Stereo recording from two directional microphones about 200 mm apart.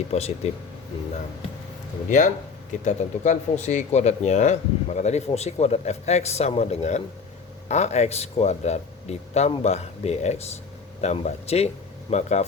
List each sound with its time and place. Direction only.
0.1 s speech: 30° left (ahead or behind)
2.0 s speech: 40° left (ahead or behind)